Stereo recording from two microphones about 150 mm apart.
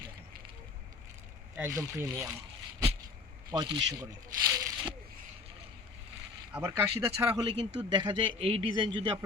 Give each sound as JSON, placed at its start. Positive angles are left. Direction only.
{"t": 1.5, "sound": "speech", "side_deg": -20}
{"t": 3.5, "sound": "speech", "side_deg": -30}
{"t": 6.5, "sound": "speech", "side_deg": -15}
{"t": 7.4, "sound": "a man's voice", "side_deg": -30}